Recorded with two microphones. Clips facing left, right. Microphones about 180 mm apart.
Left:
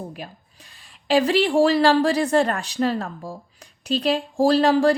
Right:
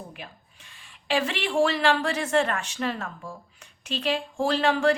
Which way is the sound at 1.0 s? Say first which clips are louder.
Left 8 dB; 35° left (ahead or behind).